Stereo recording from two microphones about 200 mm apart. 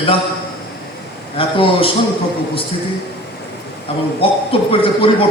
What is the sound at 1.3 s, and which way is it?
Speech, 25° left (ahead or behind).